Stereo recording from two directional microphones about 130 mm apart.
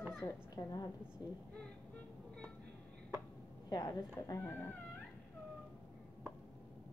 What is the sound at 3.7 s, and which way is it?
Speech, 30° left (ahead or behind).